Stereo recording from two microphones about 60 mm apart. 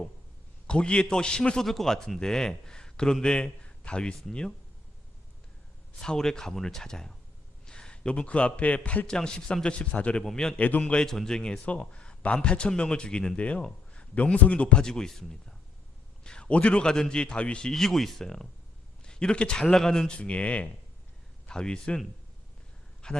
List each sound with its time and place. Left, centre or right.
0.7 s a man's voice: centre
6.0 s a man's voice: centre
10.6 s a man's voice: left
11.0 s a man's voice: centre
23.0 s a man's voice: centre